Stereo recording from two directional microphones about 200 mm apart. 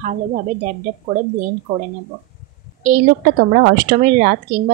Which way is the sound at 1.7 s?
35° right (ahead or behind).